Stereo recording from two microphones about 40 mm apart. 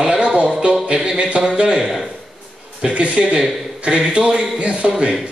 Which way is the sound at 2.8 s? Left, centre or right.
Centre.